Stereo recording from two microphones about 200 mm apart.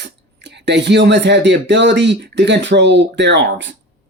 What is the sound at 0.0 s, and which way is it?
Speech, 60° right (ahead or behind).